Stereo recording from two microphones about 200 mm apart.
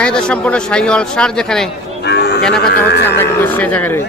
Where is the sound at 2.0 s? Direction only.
55° left (ahead or behind).